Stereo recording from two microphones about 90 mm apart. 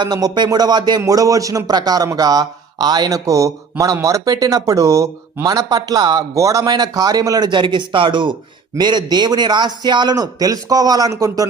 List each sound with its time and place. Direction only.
0.0 s speech: 50° right (ahead or behind)
1.0 s speech: 40° right (ahead or behind); by 8.4 s 65° right (ahead or behind)
8.8 s speech: 55° right (ahead or behind)